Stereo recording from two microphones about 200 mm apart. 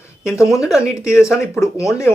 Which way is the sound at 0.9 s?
15° left (ahead or behind).